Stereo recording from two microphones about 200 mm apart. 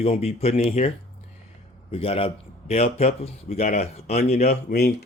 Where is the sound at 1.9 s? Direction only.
30° left (ahead or behind).